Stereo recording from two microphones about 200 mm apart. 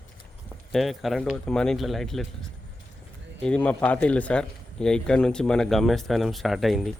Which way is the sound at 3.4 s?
5° left (ahead or behind).